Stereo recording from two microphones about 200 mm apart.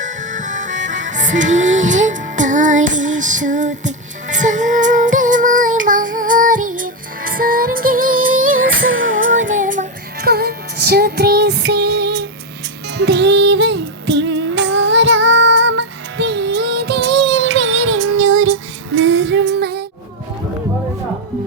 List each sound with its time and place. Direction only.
0.0 s music: 40° right (ahead or behind)
8.4 s music: 90° right
9.5 s music: 40° right (ahead or behind)